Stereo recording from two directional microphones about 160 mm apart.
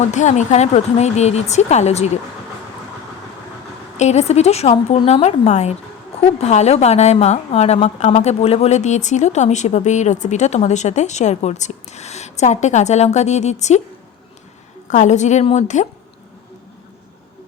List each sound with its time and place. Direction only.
0.1 s a woman's voice: 50° left (ahead or behind)
3.9 s a woman's voice: 45° left (ahead or behind)
14.8 s a woman's voice: 50° left (ahead or behind)